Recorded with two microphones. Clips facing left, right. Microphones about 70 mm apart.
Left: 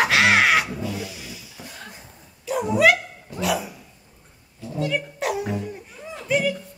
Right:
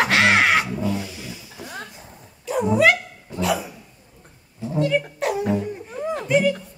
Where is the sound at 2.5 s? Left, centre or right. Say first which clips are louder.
Right 2 dB; right.